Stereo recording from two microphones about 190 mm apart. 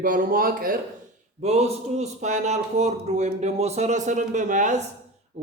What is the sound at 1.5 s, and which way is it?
A man's voice, 35° right (ahead or behind).